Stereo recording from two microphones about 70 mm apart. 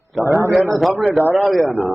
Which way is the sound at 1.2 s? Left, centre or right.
Right.